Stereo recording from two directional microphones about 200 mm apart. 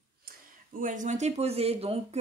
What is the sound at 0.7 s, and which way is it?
Speech, 40° right (ahead or behind).